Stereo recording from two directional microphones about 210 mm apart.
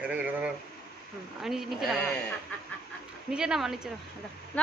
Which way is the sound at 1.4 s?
Centre (ahead or behind).